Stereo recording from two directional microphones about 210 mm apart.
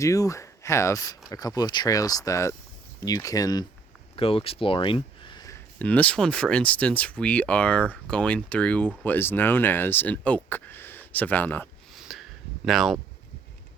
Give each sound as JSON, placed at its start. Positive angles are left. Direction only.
{"t": 0.0, "sound": "speech", "side_deg": 15}
{"t": 5.8, "sound": "speech", "side_deg": 5}
{"t": 11.9, "sound": "a sound", "side_deg": 0}
{"t": 12.6, "sound": "speech", "side_deg": 0}